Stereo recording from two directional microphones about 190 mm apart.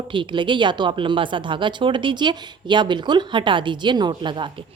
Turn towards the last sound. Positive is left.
turn(degrees=-25)  # may be behind; listen again after turning